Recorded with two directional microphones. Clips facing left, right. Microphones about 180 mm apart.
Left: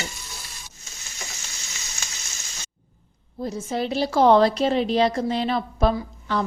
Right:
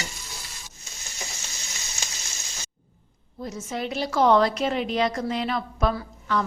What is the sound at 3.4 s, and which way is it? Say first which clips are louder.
A woman's voice: left 4 dB; 30° left (ahead or behind).